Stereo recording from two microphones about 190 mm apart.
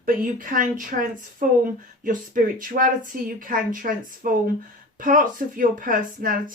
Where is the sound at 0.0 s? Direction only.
45° right (ahead or behind).